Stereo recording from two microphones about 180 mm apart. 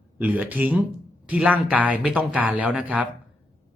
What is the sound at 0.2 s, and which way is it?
Speech, 10° right (ahead or behind).